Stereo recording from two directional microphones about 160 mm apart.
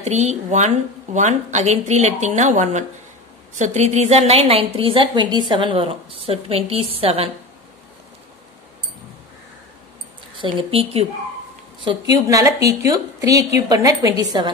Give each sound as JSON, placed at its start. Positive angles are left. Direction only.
{"t": 0.0, "sound": "a woman's voice", "side_deg": -45}
{"t": 10.4, "sound": "a woman's voice", "side_deg": -35}